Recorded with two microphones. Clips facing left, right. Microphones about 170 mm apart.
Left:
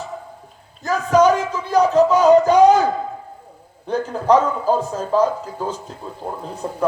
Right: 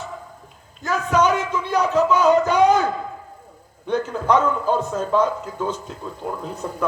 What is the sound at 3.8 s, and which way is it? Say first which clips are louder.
A man's voice: left 3 dB; 35° left (ahead or behind).